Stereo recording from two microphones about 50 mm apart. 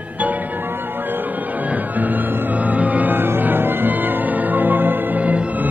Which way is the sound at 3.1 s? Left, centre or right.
Right.